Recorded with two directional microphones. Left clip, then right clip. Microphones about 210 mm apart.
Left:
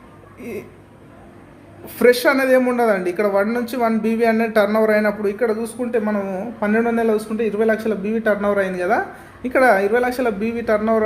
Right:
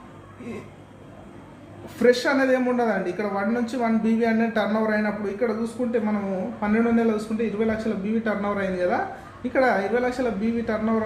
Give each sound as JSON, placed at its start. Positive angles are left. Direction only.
{"t": 2.0, "sound": "speech", "side_deg": 45}